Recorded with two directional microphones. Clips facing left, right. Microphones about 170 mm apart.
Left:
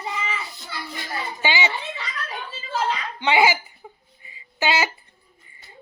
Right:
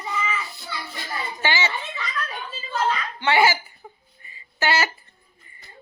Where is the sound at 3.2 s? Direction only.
15° left (ahead or behind).